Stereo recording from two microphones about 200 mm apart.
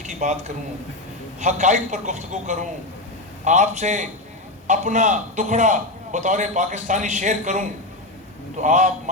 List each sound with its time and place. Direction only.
0.0 s a sound: 35° right (ahead or behind)
1.4 s a man's voice: 35° right (ahead or behind)
8.6 s a man's voice: 35° right (ahead or behind)